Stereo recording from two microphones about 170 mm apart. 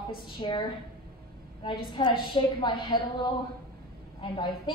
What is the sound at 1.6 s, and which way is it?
A woman's voice, 30° left (ahead or behind).